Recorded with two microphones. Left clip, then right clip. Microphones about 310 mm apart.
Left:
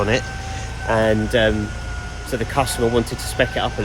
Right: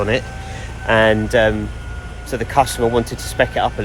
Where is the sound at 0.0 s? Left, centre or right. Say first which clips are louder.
Right 1 dB; centre.